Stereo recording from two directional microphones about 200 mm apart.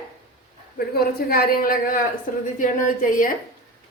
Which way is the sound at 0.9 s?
50° left (ahead or behind).